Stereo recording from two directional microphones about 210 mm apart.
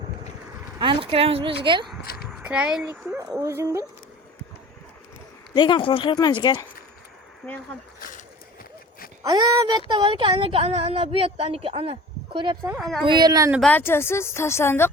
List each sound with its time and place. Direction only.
0.8 s speech: 25° right (ahead or behind)
2.2 s speech: 5° right (ahead or behind)
5.5 s speech: 20° left (ahead or behind)
7.4 s speech: centre (ahead or behind)
7.9 s a sound: 40° left (ahead or behind)
9.2 s speech: 20° right (ahead or behind)
12.7 s speech: centre (ahead or behind)
13.0 s speech: 20° right (ahead or behind)
13.6 s speech: 5° left (ahead or behind)